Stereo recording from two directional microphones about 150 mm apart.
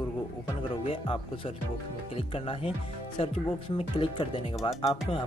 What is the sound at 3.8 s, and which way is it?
Speech, 35° left (ahead or behind).